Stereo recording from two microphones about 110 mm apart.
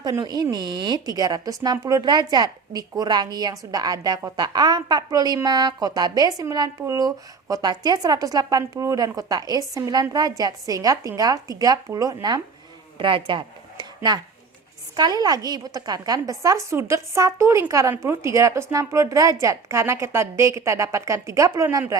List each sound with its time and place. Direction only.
0.0 s a woman's voice: 40° right (ahead or behind)
13.0 s a woman's voice: 50° right (ahead or behind); by 21.9 s 30° right (ahead or behind)